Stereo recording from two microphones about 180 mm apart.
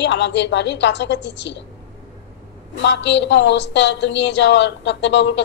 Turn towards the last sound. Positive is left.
turn(degrees=85)